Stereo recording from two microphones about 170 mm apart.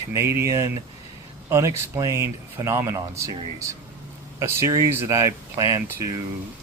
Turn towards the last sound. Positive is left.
turn(degrees=-20)  # may be behind; listen again after turning